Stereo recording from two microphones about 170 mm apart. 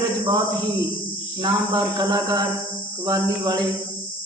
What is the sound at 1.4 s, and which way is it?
Speech, 25° right (ahead or behind).